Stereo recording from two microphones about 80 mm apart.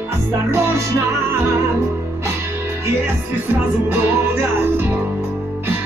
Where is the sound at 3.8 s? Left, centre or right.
Right.